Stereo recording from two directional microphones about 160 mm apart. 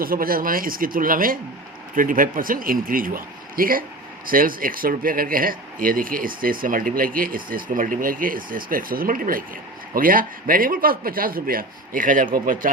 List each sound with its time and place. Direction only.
0.0 s speech: 65° right (ahead or behind)